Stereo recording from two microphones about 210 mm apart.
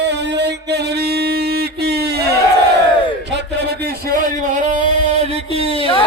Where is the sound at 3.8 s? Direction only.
45° right (ahead or behind).